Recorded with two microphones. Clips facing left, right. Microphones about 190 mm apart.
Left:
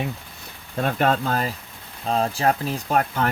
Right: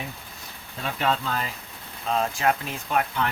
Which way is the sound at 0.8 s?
50° left (ahead or behind).